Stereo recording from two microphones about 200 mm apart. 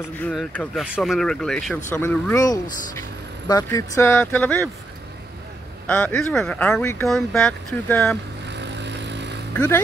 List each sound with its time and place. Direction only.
0.2 s speech: 5° left (ahead or behind)
5.9 s speech: 10° left (ahead or behind)
7.1 s speech: centre (ahead or behind)
8.5 s vehicle: 60° right (ahead or behind)
9.6 s speech: 10° left (ahead or behind)